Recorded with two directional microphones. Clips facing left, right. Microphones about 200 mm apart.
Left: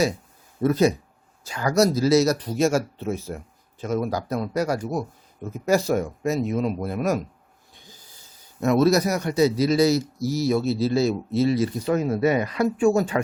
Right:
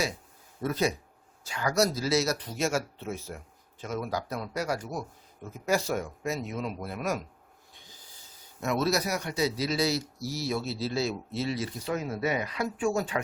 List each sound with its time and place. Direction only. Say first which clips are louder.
0.6 s speech: left 9 dB; 45° left (ahead or behind)
8.6 s speech: left 9 dB; 45° left (ahead or behind)